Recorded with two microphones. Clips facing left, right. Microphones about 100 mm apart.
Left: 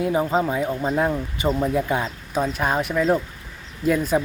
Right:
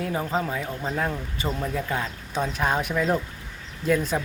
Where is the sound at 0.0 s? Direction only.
15° left (ahead or behind).